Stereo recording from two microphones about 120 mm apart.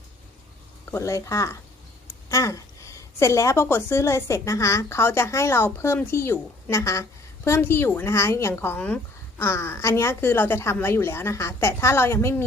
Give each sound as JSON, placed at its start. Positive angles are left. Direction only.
{"t": 0.9, "sound": "a woman's voice", "side_deg": 25}